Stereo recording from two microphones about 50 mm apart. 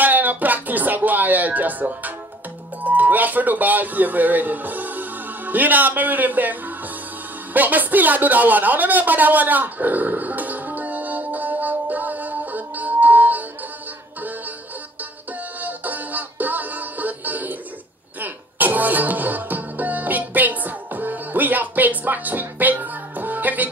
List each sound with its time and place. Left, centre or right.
0.0 s music: right
2.8 s speech: right
7.5 s a sound: right
15.6 s music: right